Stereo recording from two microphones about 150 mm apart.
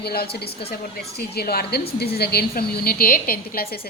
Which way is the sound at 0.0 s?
90° left.